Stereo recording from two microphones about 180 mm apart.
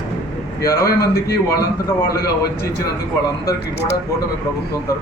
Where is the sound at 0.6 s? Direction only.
15° left (ahead or behind).